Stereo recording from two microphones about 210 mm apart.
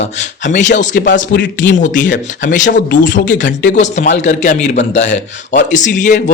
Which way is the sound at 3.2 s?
40° left (ahead or behind).